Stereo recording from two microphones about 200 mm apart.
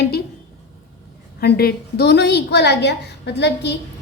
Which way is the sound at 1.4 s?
50° left (ahead or behind).